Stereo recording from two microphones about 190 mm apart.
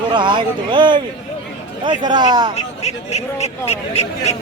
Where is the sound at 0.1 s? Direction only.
25° right (ahead or behind).